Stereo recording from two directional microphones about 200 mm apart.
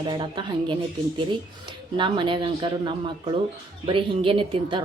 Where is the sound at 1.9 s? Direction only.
25° right (ahead or behind).